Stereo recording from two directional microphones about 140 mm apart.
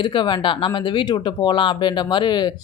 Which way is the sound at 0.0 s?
35° left (ahead or behind).